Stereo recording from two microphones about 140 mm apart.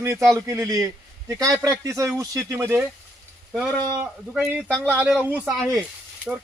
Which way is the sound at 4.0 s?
5° right (ahead or behind).